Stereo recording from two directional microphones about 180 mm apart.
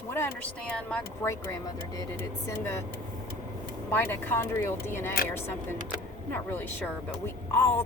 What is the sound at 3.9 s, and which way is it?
Speech, 10° left (ahead or behind).